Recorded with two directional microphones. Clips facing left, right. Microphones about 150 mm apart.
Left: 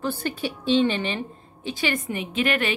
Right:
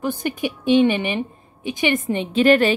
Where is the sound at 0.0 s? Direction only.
15° right (ahead or behind).